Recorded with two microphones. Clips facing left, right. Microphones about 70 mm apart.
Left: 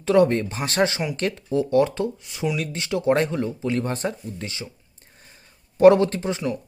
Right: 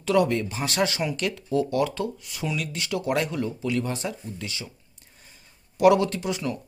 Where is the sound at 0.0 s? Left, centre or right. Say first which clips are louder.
Left 4 dB; left.